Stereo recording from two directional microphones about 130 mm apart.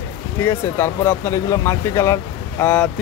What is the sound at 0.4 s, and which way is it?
Speech, 20° left (ahead or behind).